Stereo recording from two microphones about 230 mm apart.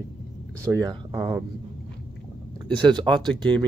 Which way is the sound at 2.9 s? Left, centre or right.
Centre.